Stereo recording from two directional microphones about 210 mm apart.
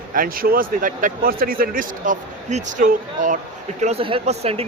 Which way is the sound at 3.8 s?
30° right (ahead or behind).